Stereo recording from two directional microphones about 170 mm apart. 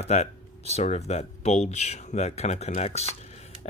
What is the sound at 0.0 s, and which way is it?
Speech, 40° left (ahead or behind).